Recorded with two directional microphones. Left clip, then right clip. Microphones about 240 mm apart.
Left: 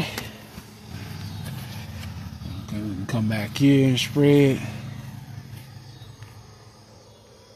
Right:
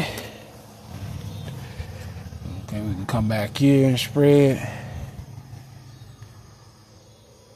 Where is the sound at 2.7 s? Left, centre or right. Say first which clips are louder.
Right 2 dB; centre.